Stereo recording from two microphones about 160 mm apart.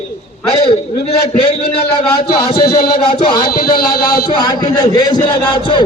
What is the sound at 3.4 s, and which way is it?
Speech, 65° left (ahead or behind).